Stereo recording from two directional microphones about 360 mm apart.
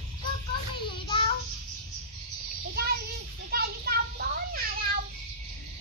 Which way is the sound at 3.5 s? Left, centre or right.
Right.